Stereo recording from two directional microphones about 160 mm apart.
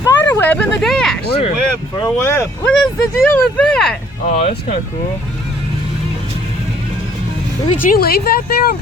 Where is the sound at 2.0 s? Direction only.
15° left (ahead or behind).